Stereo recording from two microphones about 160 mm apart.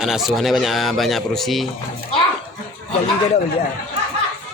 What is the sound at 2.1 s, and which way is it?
Speech, 35° left (ahead or behind).